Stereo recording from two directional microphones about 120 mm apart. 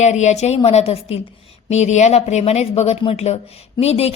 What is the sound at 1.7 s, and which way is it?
A woman's voice, 70° left (ahead or behind).